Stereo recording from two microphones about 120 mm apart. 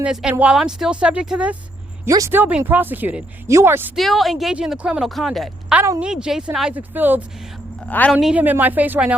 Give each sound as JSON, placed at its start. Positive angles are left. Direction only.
{"t": 0.0, "sound": "speech", "side_deg": -5}
{"t": 2.0, "sound": "speech", "side_deg": -30}
{"t": 2.3, "sound": "speech", "side_deg": -15}
{"t": 3.9, "sound": "speech", "side_deg": 0}
{"t": 6.7, "sound": "speech", "side_deg": -15}
{"t": 7.9, "sound": "speech", "side_deg": 10}
{"t": 8.1, "sound": "speech", "side_deg": -10}